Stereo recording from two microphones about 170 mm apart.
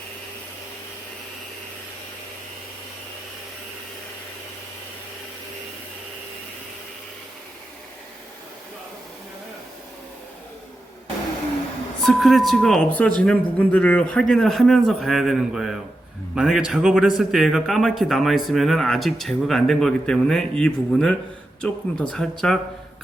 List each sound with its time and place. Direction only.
12.0 s speech: centre (ahead or behind)